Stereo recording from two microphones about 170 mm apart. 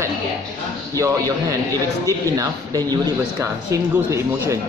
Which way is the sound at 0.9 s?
20° right (ahead or behind).